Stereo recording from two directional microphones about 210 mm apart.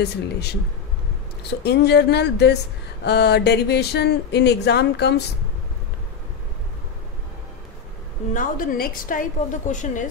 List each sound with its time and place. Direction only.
0.0 s speech: 50° left (ahead or behind)
1.6 s speech: 50° left (ahead or behind)
8.3 s a woman's voice: 40° left (ahead or behind)